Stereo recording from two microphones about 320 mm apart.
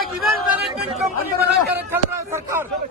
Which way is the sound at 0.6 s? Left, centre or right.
Right.